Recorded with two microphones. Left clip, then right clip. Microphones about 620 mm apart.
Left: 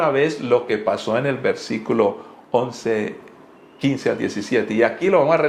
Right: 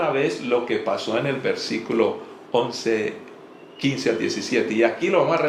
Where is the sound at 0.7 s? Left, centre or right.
Left.